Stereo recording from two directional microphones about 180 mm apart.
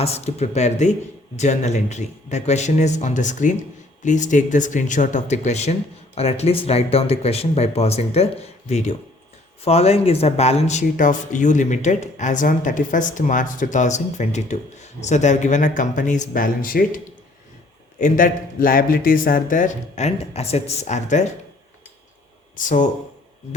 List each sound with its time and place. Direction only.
0.0 s speech: 35° left (ahead or behind)
18.0 s speech: 50° left (ahead or behind)
22.5 s speech: 45° left (ahead or behind)